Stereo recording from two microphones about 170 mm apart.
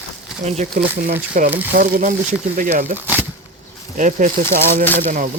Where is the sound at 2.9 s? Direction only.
10° right (ahead or behind).